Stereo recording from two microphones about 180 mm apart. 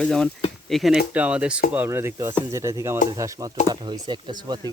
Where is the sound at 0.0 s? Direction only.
5° left (ahead or behind).